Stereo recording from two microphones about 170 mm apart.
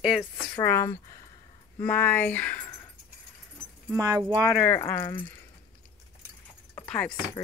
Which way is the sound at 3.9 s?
20° right (ahead or behind).